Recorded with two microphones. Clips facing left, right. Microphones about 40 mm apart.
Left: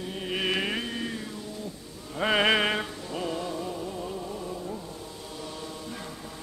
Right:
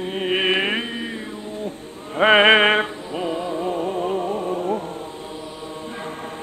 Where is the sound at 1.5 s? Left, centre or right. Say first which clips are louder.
Right 8 dB; right.